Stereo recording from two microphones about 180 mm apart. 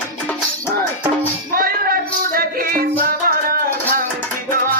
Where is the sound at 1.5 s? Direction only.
55° right (ahead or behind).